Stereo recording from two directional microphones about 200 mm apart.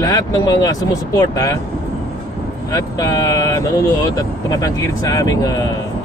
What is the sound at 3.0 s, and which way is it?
Speech, 15° left (ahead or behind).